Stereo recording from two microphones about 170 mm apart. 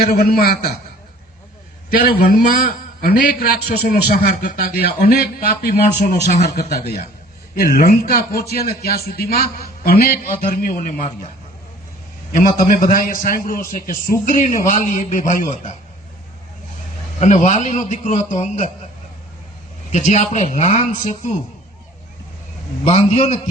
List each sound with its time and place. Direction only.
0.0 s a man's voice: 65° left (ahead or behind)
1.9 s a man's voice: 60° left (ahead or behind)
12.4 s a man's voice: 55° left (ahead or behind)
17.2 s a man's voice: 45° left (ahead or behind)
19.9 s a man's voice: 40° left (ahead or behind)
22.8 s a man's voice: 35° left (ahead or behind)